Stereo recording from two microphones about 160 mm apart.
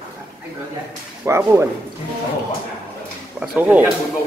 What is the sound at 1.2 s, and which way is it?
Speech, 15° right (ahead or behind).